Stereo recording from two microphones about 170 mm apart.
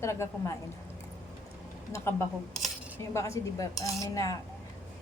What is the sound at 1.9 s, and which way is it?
Speech, 15° left (ahead or behind).